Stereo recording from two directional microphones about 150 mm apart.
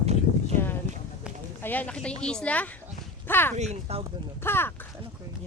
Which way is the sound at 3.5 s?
50° right (ahead or behind).